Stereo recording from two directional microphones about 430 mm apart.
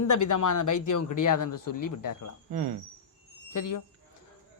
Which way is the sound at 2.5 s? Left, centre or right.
Right.